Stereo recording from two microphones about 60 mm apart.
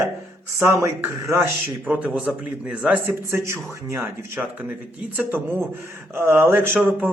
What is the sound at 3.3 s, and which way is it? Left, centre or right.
Speech, right.